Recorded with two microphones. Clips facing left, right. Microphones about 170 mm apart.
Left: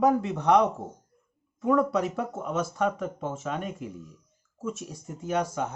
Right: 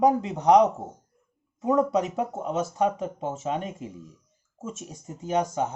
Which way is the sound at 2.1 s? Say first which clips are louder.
Right 2 dB; 20° right (ahead or behind).